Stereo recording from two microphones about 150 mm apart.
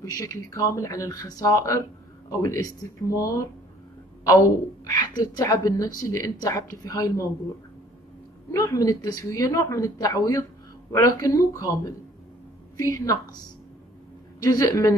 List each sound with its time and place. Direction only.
0.0 s speech: 20° left (ahead or behind)
4.8 s speech: 30° left (ahead or behind)
8.5 s speech: 25° left (ahead or behind)
14.4 s speech: 25° left (ahead or behind)